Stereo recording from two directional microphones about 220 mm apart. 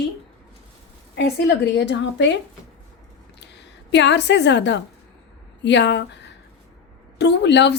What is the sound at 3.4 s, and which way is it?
A woman's voice, 50° left (ahead or behind).